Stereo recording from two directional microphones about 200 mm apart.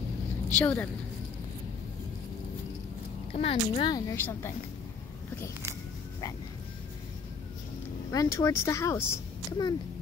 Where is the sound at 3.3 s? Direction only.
30° left (ahead or behind); by 4.5 s 15° left (ahead or behind).